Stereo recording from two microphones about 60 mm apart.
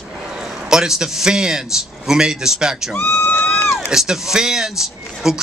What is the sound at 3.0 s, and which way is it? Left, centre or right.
Speech, left.